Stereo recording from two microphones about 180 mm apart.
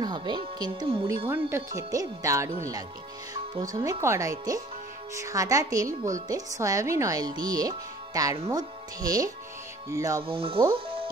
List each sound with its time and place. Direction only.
0.0 s a woman's voice: 25° right (ahead or behind)
10.2 s speech: 30° right (ahead or behind)